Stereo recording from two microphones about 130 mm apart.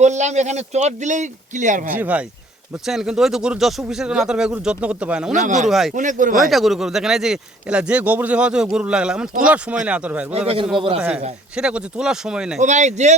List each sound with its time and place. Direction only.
0.0 s speech: 65° right (ahead or behind)
1.9 s a man's voice: 10° right (ahead or behind)
5.3 s speech: 70° right (ahead or behind)
5.6 s speech: centre (ahead or behind)
5.9 s speech: 80° right
6.5 s a man's voice: centre (ahead or behind)
10.3 s a man's voice: 50° right (ahead or behind)
11.5 s a man's voice: 5° right (ahead or behind)
12.5 s speech: 65° right (ahead or behind)